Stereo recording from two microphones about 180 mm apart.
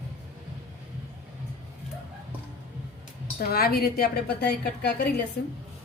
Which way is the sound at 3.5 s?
55° left (ahead or behind).